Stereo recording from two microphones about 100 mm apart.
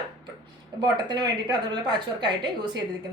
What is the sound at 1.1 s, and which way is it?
Speech, 45° right (ahead or behind).